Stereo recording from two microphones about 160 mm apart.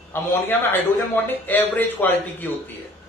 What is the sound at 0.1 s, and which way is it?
A man's voice, 15° left (ahead or behind).